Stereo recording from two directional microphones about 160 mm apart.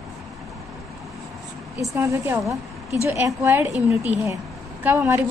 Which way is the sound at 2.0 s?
15° right (ahead or behind).